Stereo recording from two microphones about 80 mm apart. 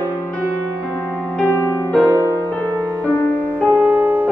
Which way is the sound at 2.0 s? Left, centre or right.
Right.